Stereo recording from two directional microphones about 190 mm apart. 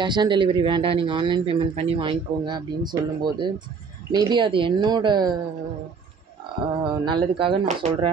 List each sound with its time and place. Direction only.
0.0 s speech: 25° right (ahead or behind)
6.8 s speech: 25° right (ahead or behind)